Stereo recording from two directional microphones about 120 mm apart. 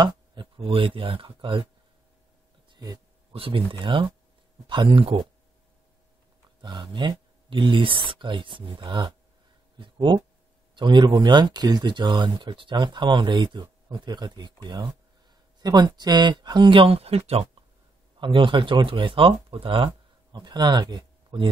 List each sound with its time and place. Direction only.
0.0 s a sound: 40° right (ahead or behind)
0.6 s speech: 50° right (ahead or behind)
2.7 s a sound: 30° right (ahead or behind)
3.3 s speech: 50° right (ahead or behind)
6.6 s speech: 40° right (ahead or behind); by 17.5 s 55° right (ahead or behind)
18.2 s speech: 45° right (ahead or behind)
20.3 s speech: 35° right (ahead or behind)